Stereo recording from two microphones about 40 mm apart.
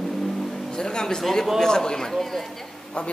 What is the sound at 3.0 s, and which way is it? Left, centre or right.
Speech, left.